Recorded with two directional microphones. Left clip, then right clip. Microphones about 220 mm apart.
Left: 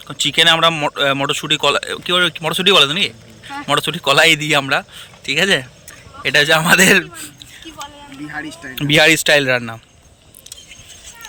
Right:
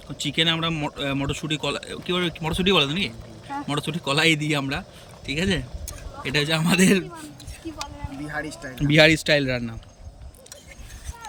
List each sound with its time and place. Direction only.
0.1 s speech: 5° right (ahead or behind)
8.3 s speech: 30° right (ahead or behind)
8.9 s speech: 5° right (ahead or behind)